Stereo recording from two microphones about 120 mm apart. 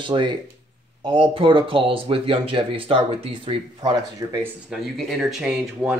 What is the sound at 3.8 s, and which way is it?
Speech, 35° right (ahead or behind).